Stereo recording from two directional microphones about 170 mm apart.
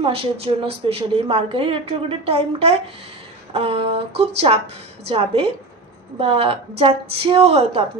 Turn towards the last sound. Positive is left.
turn(degrees=-35)  # may be behind; listen again after turning